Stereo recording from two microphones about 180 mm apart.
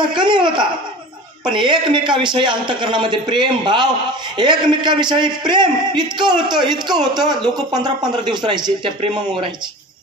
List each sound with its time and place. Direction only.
0.2 s speech: 25° right (ahead or behind)